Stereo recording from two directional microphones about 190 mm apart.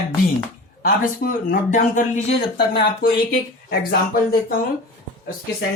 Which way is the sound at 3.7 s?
50° left (ahead or behind).